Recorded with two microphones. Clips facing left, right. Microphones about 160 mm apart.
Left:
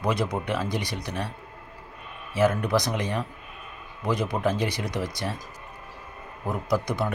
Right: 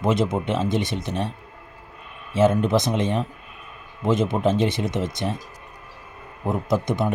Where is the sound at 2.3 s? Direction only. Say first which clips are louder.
Right 4 dB; 25° right (ahead or behind).